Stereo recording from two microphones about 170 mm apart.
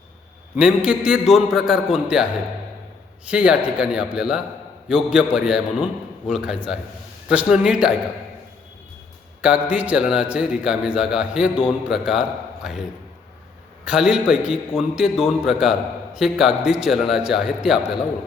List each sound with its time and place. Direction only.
0.5 s a man's voice: 5° right (ahead or behind)
3.2 s a man's voice: 5° right (ahead or behind)
9.4 s a man's voice: 10° right (ahead or behind)
13.8 s a man's voice: 5° right (ahead or behind)